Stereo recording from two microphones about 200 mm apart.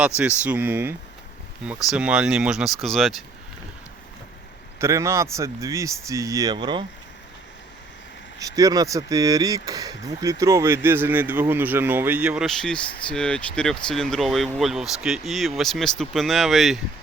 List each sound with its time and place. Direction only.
0.2 s speech: 5° right (ahead or behind)
4.8 s speech: 15° right (ahead or behind)
8.4 s speech: 15° right (ahead or behind); by 16.8 s centre (ahead or behind)